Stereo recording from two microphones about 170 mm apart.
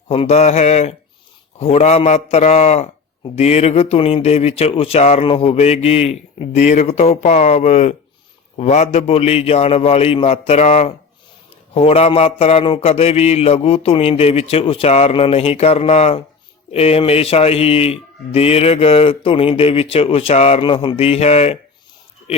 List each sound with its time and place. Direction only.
0.1 s speech: 40° left (ahead or behind)